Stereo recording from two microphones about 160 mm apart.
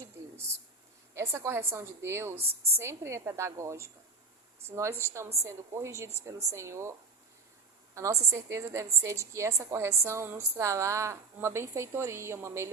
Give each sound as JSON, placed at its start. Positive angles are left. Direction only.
{"t": 0.2, "sound": "a sound", "side_deg": -15}
{"t": 1.1, "sound": "a woman's voice", "side_deg": -15}
{"t": 7.9, "sound": "a woman's voice", "side_deg": -20}